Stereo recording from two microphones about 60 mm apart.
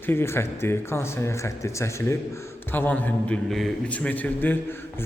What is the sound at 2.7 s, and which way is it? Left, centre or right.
A man's voice, left.